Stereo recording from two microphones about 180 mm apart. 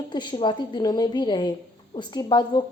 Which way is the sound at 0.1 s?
25° left (ahead or behind).